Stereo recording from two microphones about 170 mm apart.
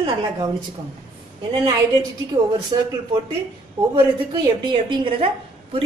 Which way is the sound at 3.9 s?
25° right (ahead or behind).